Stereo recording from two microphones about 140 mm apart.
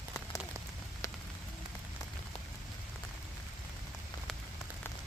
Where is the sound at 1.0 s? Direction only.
20° left (ahead or behind).